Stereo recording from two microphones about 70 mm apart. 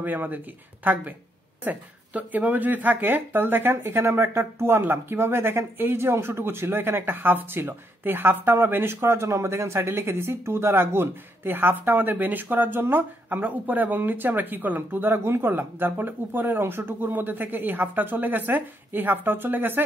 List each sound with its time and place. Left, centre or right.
0.0 s speech: right